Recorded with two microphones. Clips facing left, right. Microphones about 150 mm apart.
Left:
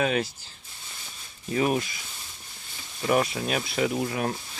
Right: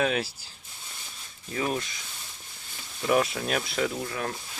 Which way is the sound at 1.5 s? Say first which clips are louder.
Left 5 dB; 15° left (ahead or behind).